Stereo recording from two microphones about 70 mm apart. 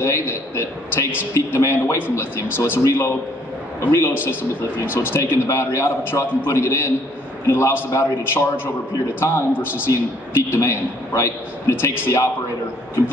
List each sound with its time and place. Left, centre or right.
0.0 s a man's voice: left
4.9 s a man's voice: left